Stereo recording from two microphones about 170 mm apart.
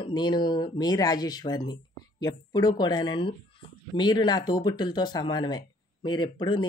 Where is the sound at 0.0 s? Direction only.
25° left (ahead or behind).